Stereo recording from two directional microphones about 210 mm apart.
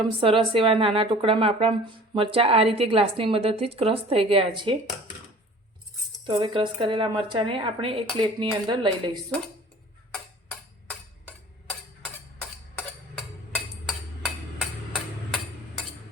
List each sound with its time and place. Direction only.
0.0 s a woman's voice: 25° right (ahead or behind)
6.2 s a woman's voice: 25° right (ahead or behind)
10.5 s a sound: 5° left (ahead or behind)